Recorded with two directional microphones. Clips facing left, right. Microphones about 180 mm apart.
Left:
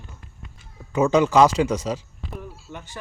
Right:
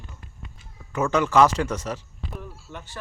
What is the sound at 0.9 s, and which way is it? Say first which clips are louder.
A man's voice: left 3 dB; 15° left (ahead or behind).